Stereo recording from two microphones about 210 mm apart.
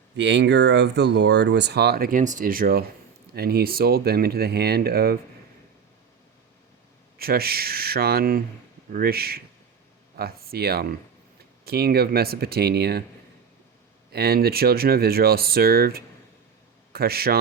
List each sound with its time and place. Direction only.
0.2 s speech: 55° right (ahead or behind)
7.2 s speech: 45° right (ahead or behind)
14.1 s speech: 50° right (ahead or behind)